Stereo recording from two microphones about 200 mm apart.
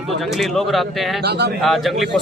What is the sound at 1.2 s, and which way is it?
Speech, 55° right (ahead or behind).